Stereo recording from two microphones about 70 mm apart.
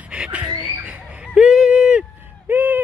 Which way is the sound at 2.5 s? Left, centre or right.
Right.